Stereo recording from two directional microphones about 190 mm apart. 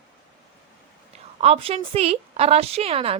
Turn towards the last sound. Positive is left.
turn(degrees=-30)  # may be behind; listen again after turning